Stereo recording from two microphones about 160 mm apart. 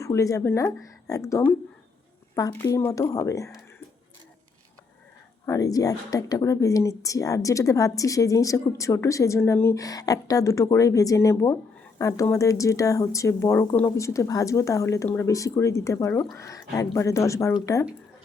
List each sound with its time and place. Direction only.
0.0 s speech: 20° left (ahead or behind)
5.5 s speech: 20° left (ahead or behind)